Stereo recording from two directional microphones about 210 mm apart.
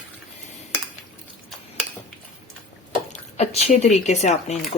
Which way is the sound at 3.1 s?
30° left (ahead or behind).